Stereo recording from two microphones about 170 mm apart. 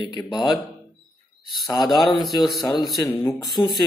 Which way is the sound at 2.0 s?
Centre (ahead or behind).